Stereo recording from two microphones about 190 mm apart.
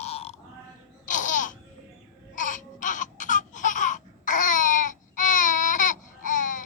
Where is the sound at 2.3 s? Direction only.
40° left (ahead or behind).